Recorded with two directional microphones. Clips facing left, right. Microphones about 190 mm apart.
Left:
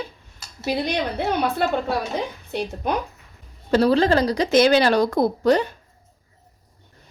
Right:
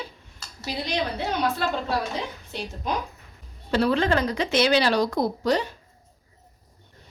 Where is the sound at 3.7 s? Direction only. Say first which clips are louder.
Left 5 dB; 35° left (ahead or behind); by 5.7 s 55° left (ahead or behind).